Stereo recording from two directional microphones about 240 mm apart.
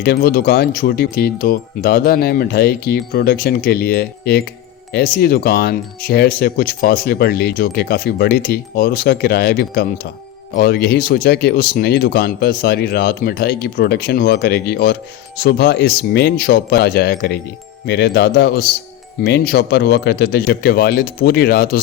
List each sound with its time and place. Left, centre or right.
0.0 s speech: left